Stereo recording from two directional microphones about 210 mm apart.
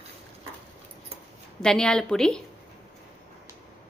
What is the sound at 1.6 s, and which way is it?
Speech, 5° left (ahead or behind).